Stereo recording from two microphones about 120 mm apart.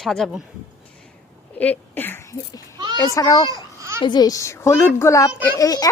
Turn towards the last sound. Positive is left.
turn(degrees=30)  # may be behind; listen again after turning